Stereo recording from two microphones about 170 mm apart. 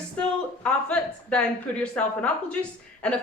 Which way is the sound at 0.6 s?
5° left (ahead or behind).